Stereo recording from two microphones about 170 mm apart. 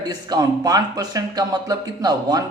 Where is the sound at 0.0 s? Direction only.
25° right (ahead or behind).